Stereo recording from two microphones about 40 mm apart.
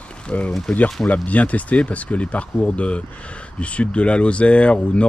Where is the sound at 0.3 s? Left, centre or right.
Left.